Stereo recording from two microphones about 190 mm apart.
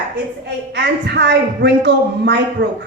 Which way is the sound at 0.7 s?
65° right (ahead or behind).